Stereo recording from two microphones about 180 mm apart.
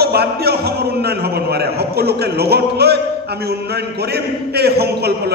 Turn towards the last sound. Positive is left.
turn(degrees=-65)  # may be behind; listen again after turning